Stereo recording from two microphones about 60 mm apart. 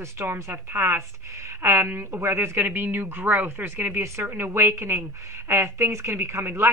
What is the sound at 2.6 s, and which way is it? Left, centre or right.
A woman's voice, right.